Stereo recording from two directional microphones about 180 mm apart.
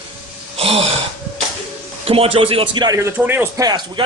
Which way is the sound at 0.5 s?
35° right (ahead or behind).